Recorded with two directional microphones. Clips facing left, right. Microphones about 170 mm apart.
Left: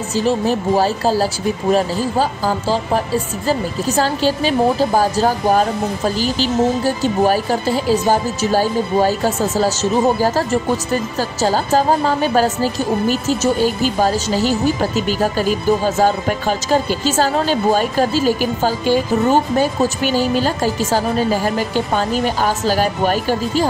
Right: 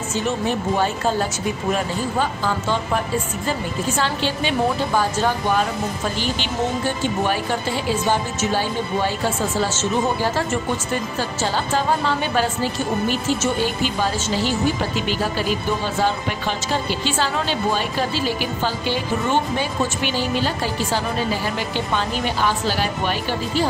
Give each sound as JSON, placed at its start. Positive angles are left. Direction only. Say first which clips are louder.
{"t": 0.1, "sound": "a woman's voice", "louder": "left 6 dB", "side_deg": 35}